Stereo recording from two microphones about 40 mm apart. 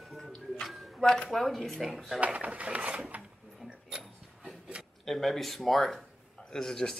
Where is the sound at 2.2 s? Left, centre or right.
Right.